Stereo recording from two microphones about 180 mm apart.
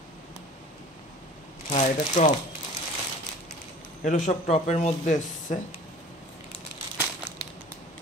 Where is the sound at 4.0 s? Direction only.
45° left (ahead or behind).